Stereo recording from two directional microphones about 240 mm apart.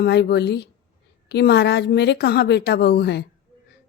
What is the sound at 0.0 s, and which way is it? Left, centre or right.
Speech, left.